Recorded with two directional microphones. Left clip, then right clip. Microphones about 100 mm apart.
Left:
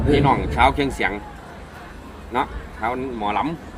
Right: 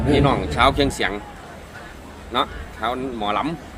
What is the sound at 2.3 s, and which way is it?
Speech, 35° right (ahead or behind).